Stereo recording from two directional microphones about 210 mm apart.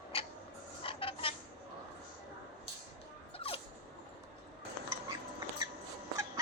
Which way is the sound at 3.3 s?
25° left (ahead or behind).